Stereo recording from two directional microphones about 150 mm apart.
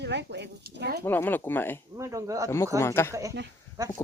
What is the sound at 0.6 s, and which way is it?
Speech, 90° right.